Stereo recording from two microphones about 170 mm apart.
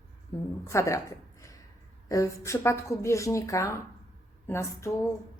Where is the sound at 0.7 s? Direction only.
15° left (ahead or behind).